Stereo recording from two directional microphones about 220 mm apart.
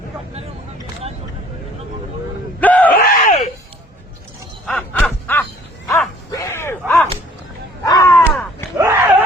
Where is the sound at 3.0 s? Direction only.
35° left (ahead or behind).